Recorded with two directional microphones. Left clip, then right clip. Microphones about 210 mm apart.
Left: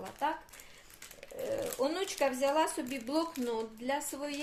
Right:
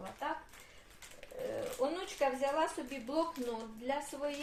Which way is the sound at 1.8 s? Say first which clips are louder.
Left 2 dB; 50° left (ahead or behind).